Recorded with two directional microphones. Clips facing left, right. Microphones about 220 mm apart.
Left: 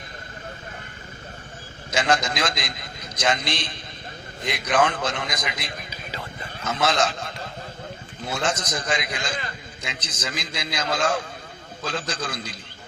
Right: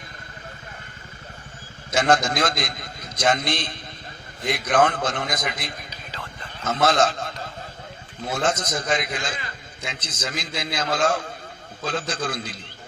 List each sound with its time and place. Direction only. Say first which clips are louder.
1.9 s a man's voice: right 3 dB; 55° right (ahead or behind)
5.9 s a sound: left 3 dB; 10° left (ahead or behind)
6.7 s a man's voice: right 3 dB; 55° right (ahead or behind)
8.3 s a man's voice: right 2 dB; 55° right (ahead or behind)